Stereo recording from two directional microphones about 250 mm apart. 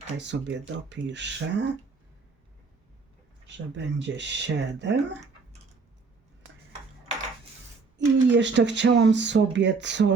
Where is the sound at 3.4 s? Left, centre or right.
Right.